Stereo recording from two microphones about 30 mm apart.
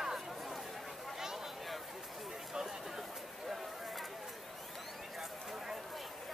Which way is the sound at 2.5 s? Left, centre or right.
Centre.